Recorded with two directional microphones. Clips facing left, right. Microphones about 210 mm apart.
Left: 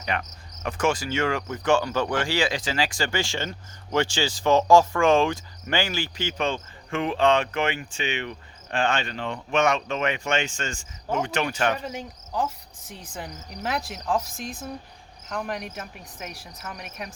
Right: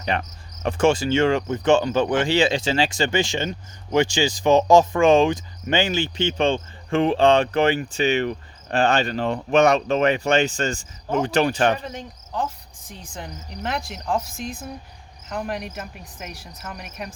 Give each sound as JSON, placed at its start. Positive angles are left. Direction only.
{"t": 0.0, "sound": "cricket", "side_deg": -30}
{"t": 3.9, "sound": "speech", "side_deg": -15}
{"t": 11.8, "sound": "cricket", "side_deg": 5}
{"t": 12.9, "sound": "speech", "side_deg": 5}